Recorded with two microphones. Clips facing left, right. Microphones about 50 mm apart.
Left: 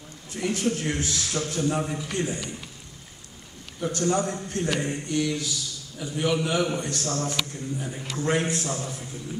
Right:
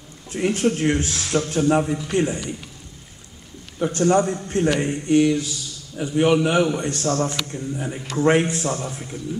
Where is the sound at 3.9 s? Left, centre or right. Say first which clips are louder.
Right 7 dB; right.